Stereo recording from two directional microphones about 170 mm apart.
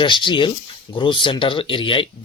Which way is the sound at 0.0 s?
30° left (ahead or behind).